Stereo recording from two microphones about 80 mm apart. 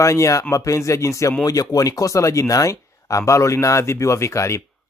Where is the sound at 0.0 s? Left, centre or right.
Left.